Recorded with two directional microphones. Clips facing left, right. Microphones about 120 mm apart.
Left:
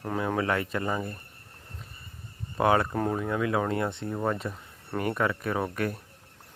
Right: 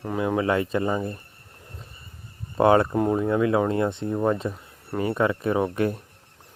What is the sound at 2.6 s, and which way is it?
Speech, 25° right (ahead or behind).